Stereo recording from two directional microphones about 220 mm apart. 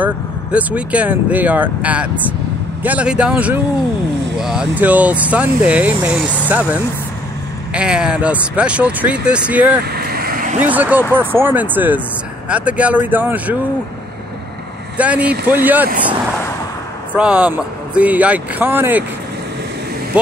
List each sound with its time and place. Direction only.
0.0 s speech: 5° right (ahead or behind)
9.8 s vehicle: 45° right (ahead or behind)
10.6 s speech: 5° right (ahead or behind)
15.0 s speech: 5° right (ahead or behind)
17.1 s speech: 5° right (ahead or behind)